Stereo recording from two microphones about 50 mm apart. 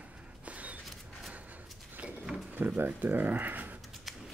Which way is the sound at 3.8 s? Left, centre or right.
Centre.